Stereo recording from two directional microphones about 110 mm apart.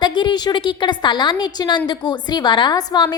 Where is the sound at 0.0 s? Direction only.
45° left (ahead or behind).